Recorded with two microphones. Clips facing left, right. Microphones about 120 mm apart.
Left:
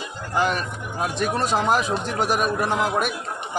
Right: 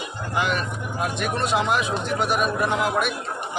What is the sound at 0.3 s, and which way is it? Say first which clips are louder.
Speech: left 2 dB; 40° left (ahead or behind).